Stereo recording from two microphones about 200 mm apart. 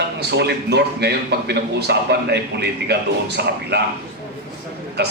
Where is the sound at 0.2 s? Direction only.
55° right (ahead or behind).